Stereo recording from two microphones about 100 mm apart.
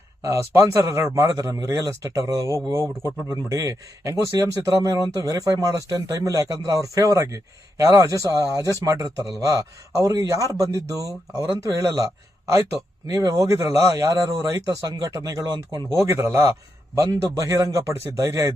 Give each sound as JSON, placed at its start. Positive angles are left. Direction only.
{"t": 0.2, "sound": "speech", "side_deg": -30}